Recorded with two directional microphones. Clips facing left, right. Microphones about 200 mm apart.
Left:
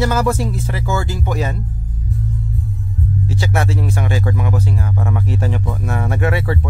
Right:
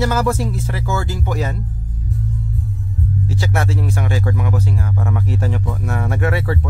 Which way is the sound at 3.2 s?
20° left (ahead or behind).